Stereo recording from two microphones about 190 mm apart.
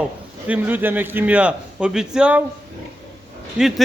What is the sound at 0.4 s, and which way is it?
A man's voice, 10° right (ahead or behind).